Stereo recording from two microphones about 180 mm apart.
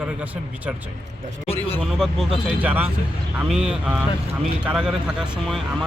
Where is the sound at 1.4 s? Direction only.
30° left (ahead or behind).